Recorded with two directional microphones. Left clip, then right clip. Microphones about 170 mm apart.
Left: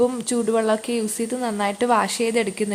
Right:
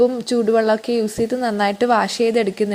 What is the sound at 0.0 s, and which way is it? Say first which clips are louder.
Speech: right 4 dB; 15° right (ahead or behind).